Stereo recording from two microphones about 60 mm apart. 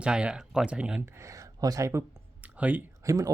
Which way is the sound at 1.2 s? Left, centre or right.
Right.